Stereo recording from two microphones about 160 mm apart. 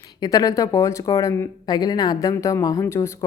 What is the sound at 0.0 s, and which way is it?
Speech, 25° left (ahead or behind).